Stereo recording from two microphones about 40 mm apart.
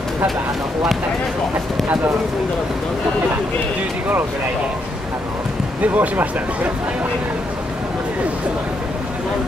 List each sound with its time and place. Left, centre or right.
5.8 s speech: right